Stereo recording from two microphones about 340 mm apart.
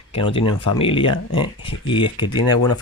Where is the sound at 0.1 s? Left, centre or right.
Centre.